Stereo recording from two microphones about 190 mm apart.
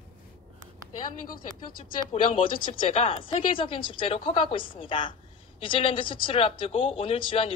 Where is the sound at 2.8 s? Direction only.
35° left (ahead or behind).